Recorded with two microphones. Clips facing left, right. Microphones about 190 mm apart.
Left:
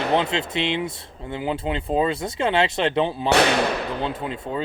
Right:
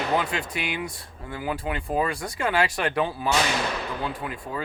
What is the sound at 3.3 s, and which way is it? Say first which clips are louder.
Speech: left 8 dB; 65° left (ahead or behind).